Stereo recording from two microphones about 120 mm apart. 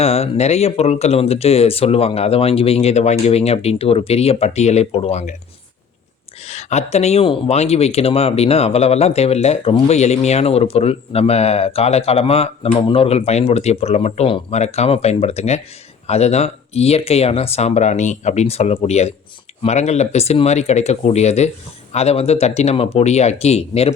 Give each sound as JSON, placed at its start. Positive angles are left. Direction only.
{"t": 0.0, "sound": "speech", "side_deg": 60}
{"t": 6.4, "sound": "speech", "side_deg": 65}